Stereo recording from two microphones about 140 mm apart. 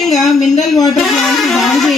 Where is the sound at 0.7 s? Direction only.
25° left (ahead or behind).